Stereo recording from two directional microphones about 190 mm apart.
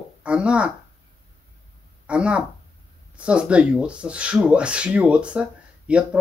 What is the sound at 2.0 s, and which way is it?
Speech, 5° right (ahead or behind).